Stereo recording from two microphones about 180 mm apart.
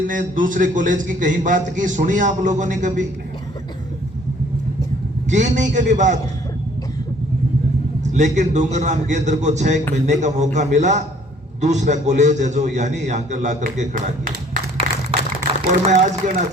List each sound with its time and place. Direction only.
0.1 s a man's voice: 45° right (ahead or behind)
5.3 s a man's voice: 45° right (ahead or behind)
8.1 s a man's voice: 40° right (ahead or behind)
15.7 s a man's voice: 40° right (ahead or behind)